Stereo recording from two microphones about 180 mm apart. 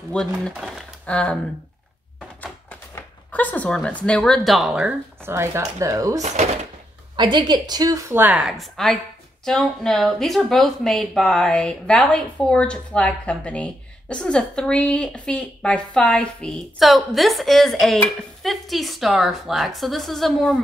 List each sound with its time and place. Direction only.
0.1 s speech: 5° left (ahead or behind); by 6.2 s 20° right (ahead or behind)
6.2 s speech: 40° right (ahead or behind)
7.2 s a woman's voice: 25° right (ahead or behind); by 20.6 s centre (ahead or behind)